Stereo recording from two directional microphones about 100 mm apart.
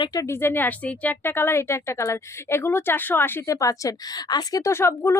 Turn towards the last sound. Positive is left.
turn(degrees=25)  # may be behind; listen again after turning